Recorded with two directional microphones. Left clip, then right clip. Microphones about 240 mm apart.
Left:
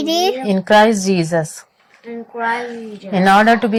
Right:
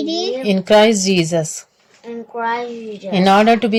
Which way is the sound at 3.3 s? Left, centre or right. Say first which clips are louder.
Left 1 dB; centre.